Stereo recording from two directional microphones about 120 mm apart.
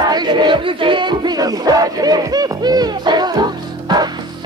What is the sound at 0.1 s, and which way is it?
Music, 40° right (ahead or behind).